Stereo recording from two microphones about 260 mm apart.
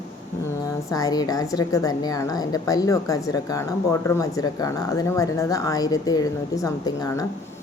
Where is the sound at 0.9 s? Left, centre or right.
Centre.